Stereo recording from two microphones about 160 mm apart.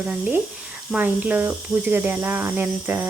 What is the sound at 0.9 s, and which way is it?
Speech, 10° right (ahead or behind).